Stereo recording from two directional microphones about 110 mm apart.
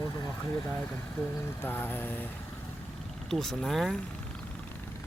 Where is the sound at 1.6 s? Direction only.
20° left (ahead or behind).